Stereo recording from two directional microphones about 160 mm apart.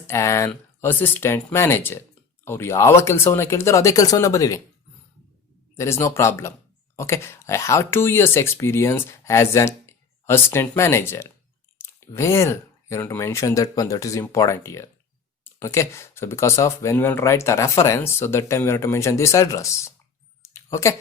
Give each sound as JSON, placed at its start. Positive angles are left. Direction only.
{"t": 0.1, "sound": "speech", "side_deg": 15}
{"t": 5.7, "sound": "speech", "side_deg": 15}
{"t": 20.4, "sound": "a sound", "side_deg": 15}